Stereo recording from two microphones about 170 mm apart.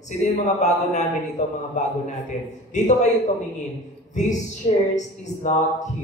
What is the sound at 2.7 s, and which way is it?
Speech, 45° left (ahead or behind).